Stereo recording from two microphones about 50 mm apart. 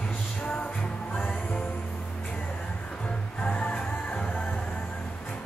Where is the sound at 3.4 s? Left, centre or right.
Left.